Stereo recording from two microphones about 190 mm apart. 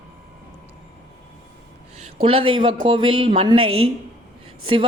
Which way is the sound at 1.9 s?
30° right (ahead or behind).